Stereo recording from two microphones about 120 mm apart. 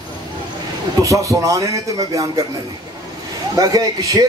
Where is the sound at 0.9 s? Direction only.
25° right (ahead or behind).